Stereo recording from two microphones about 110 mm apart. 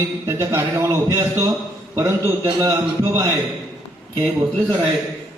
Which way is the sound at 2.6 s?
30° right (ahead or behind).